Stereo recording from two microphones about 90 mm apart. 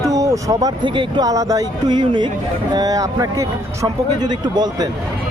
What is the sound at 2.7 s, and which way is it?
Speech, 45° right (ahead or behind).